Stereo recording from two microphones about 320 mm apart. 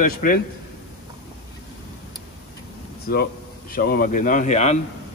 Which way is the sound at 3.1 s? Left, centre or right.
Left.